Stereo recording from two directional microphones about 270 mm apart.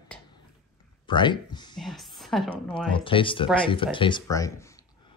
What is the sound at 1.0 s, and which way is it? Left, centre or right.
Speech, centre.